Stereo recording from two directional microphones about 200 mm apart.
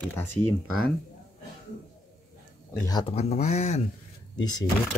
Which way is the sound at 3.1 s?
35° left (ahead or behind).